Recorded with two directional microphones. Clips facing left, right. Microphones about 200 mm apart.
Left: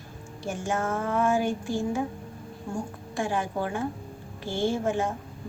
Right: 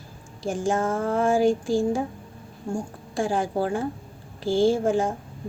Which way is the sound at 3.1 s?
35° right (ahead or behind).